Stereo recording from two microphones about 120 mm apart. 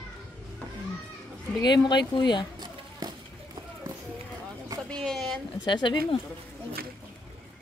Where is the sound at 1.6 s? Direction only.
40° left (ahead or behind).